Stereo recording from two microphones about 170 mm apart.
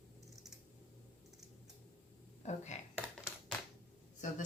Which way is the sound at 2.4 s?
45° left (ahead or behind).